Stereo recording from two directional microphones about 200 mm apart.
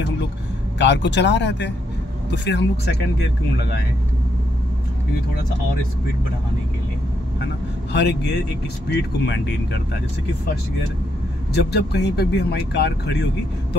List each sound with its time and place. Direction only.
0.7 s speech: 65° left (ahead or behind)
7.9 s speech: 60° left (ahead or behind)
11.5 s speech: 55° left (ahead or behind)